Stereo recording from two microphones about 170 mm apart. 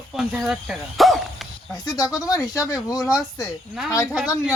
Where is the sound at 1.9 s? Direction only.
20° left (ahead or behind).